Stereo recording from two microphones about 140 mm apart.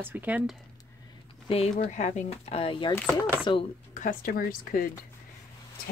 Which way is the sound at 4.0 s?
80° left.